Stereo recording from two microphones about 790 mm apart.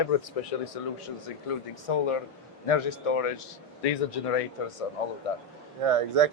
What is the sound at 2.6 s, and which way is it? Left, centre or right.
Speech, left.